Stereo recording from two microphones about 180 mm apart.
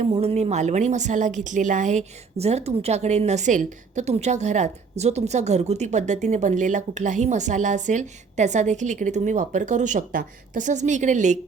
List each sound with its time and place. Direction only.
0.0 s speech: 35° right (ahead or behind)